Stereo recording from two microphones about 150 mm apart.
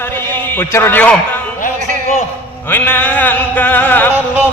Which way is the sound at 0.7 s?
15° left (ahead or behind).